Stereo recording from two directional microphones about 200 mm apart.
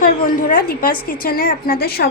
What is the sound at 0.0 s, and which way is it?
A woman's voice, 40° left (ahead or behind).